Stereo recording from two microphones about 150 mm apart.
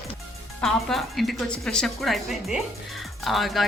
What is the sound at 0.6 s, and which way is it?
Speech, centre (ahead or behind).